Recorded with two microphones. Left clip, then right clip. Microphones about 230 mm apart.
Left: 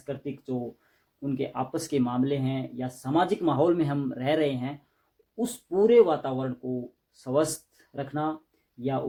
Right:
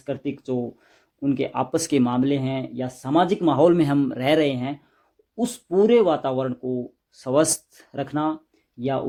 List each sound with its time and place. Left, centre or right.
0.0 s speech: right